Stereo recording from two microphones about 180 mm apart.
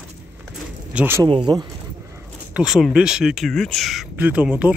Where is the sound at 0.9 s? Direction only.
10° right (ahead or behind).